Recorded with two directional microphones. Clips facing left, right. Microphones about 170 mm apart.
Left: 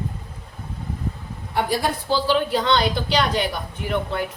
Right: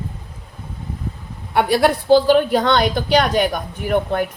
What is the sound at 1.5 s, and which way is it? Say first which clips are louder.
A woman's voice: right 7 dB; 70° right (ahead or behind).